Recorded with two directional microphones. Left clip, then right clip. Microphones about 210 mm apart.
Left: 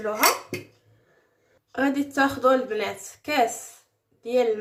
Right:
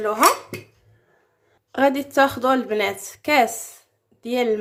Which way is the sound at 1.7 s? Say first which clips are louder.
Right 6 dB; 35° right (ahead or behind).